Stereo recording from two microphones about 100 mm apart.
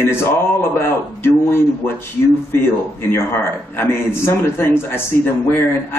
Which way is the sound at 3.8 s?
25° left (ahead or behind).